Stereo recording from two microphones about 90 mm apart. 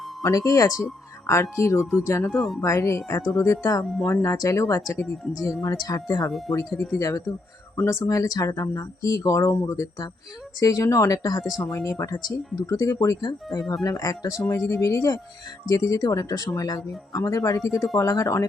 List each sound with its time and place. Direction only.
0.2 s speech: 40° left (ahead or behind)
1.8 s speech: 5° right (ahead or behind)
2.0 s speech: 30° left (ahead or behind)
2.3 s speech: centre (ahead or behind)
2.6 s speech: 35° left (ahead or behind)
8.0 s speech: 40° left (ahead or behind)